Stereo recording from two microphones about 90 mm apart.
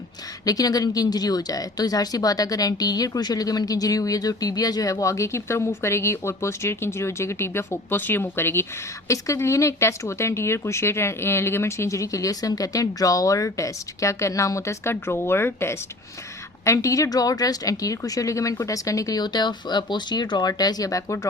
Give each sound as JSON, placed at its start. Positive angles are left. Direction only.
{"t": 0.4, "sound": "speech", "side_deg": 45}